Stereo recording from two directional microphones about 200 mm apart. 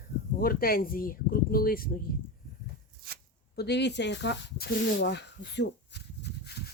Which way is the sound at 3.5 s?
55° left (ahead or behind).